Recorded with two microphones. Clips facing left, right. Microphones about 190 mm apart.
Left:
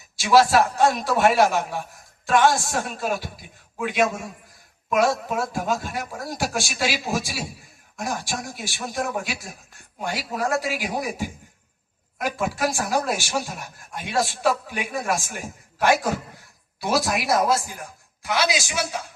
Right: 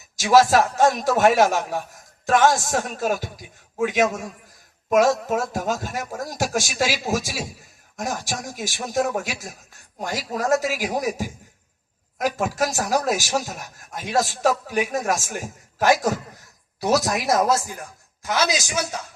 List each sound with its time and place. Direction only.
0.2 s speech: 45° right (ahead or behind)
18.3 s speech: 45° right (ahead or behind)